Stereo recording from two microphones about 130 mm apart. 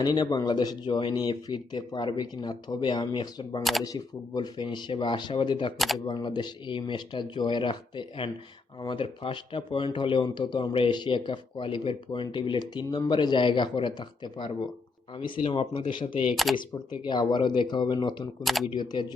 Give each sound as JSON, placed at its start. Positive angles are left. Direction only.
{"t": 0.0, "sound": "speech", "side_deg": 30}
{"t": 3.6, "sound": "speech", "side_deg": 0}
{"t": 3.8, "sound": "speech", "side_deg": 30}
{"t": 16.3, "sound": "speech", "side_deg": 0}
{"t": 17.0, "sound": "speech", "side_deg": 35}
{"t": 18.4, "sound": "speech", "side_deg": 0}
{"t": 18.7, "sound": "speech", "side_deg": 35}